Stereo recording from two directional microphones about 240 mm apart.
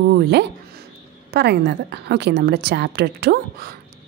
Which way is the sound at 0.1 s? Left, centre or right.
Right.